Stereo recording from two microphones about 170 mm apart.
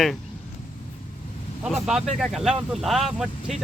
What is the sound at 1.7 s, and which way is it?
Speech, 5° right (ahead or behind).